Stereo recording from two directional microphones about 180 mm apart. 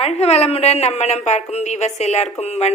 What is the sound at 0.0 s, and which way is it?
A woman's voice, 35° left (ahead or behind).